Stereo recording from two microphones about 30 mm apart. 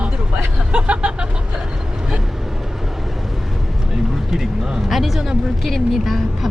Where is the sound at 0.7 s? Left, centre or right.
Right.